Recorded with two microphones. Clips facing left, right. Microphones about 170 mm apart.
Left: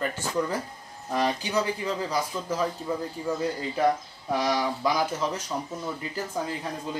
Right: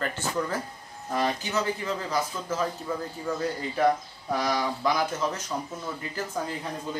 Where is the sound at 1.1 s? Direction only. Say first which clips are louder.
Left 1 dB; 15° left (ahead or behind).